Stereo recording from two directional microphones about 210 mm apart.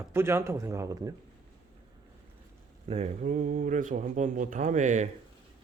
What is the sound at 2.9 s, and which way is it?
Speech, 30° right (ahead or behind).